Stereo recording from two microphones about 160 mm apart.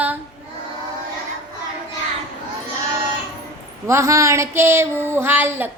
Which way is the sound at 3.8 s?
20° right (ahead or behind).